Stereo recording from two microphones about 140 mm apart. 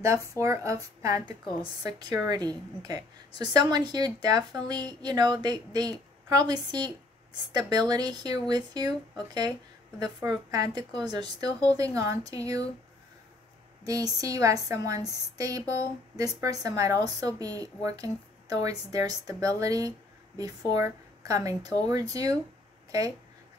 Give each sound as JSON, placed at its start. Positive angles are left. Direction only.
{"t": 0.0, "sound": "a woman's voice", "side_deg": -20}
{"t": 1.2, "sound": "a woman's voice", "side_deg": 40}
{"t": 1.9, "sound": "a woman's voice", "side_deg": -30}
{"t": 9.9, "sound": "a woman's voice", "side_deg": -30}
{"t": 13.8, "sound": "a woman's voice", "side_deg": -25}